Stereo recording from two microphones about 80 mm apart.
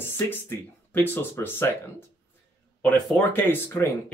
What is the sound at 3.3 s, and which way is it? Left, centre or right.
Speech, left.